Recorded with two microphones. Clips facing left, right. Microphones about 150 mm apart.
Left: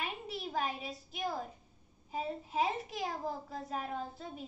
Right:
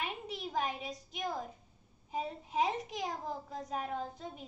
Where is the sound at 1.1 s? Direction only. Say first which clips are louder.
Left 1 dB; 5° left (ahead or behind).